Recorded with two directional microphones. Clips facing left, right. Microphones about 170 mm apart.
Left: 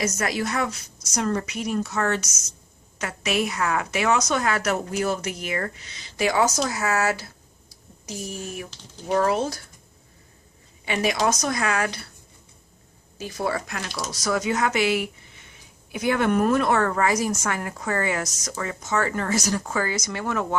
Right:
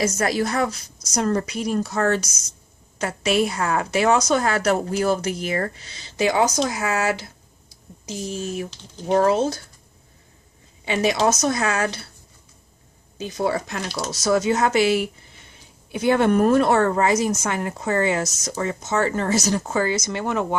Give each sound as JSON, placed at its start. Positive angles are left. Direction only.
{"t": 0.0, "sound": "a woman's voice", "side_deg": -30}
{"t": 10.9, "sound": "a woman's voice", "side_deg": -25}
{"t": 13.2, "sound": "a woman's voice", "side_deg": -25}